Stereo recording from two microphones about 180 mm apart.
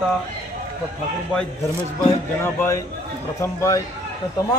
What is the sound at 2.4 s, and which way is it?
A man's voice, 15° left (ahead or behind).